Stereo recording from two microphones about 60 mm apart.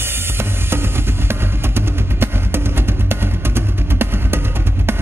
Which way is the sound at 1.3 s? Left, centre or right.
Right.